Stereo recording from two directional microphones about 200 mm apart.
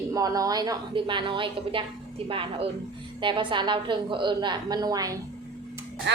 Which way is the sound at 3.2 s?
25° right (ahead or behind).